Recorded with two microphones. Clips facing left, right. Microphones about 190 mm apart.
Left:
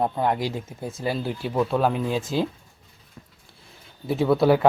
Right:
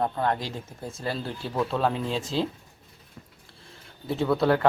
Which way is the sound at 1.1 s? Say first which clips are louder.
Left 5 dB; centre (ahead or behind).